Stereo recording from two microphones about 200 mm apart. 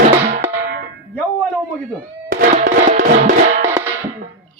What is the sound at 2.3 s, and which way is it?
Music, 40° right (ahead or behind).